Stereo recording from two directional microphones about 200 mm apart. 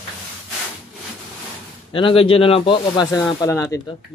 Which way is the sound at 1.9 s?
25° left (ahead or behind).